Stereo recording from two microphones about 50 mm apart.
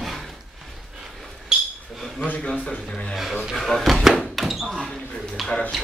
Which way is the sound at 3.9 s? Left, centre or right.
Centre.